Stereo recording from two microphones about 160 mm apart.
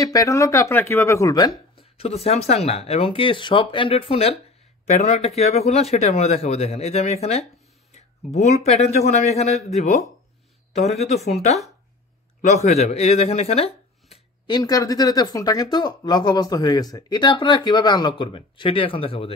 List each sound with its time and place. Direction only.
0.0 s speech: 20° left (ahead or behind)
1.8 s speech: 40° left (ahead or behind)
14.5 s speech: 20° left (ahead or behind)